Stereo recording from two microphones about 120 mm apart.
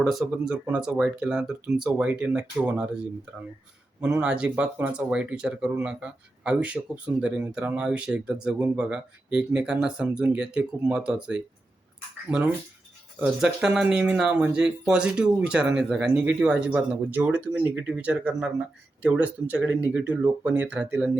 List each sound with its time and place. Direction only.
0.0 s speech: centre (ahead or behind)
4.2 s speech: 10° right (ahead or behind)